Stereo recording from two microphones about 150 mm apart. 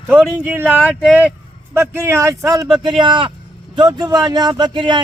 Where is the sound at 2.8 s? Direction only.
30° right (ahead or behind).